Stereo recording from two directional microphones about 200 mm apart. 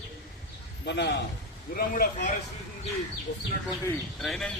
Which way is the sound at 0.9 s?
60° left (ahead or behind).